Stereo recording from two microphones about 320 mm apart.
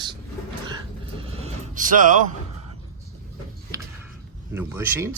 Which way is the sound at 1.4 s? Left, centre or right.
Right.